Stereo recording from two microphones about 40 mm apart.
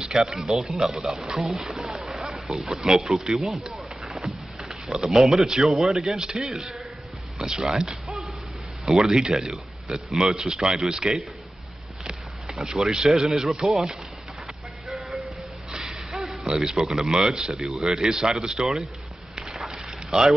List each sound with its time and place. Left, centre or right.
0.0 s a man's voice: centre
4.0 s a sound: centre
5.0 s a man's voice: centre
8.8 s a man's voice: centre
12.4 s a man's voice: centre
15.2 s a sound: centre
16.2 s a man's voice: centre
19.5 s a sound: centre
20.1 s speech: centre